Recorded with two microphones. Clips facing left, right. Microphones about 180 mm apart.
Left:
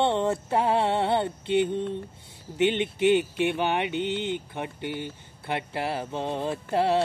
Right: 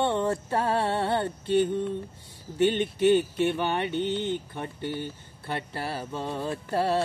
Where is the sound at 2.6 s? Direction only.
15° left (ahead or behind).